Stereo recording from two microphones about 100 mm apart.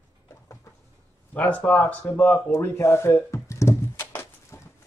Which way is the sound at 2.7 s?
30° left (ahead or behind).